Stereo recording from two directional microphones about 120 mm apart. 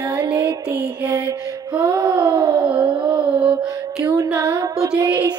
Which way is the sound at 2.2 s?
40° right (ahead or behind).